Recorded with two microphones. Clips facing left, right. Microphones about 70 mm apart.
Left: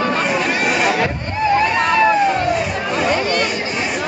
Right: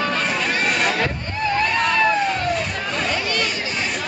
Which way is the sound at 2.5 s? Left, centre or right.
Centre.